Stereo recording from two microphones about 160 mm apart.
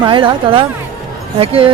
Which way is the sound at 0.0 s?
30° right (ahead or behind).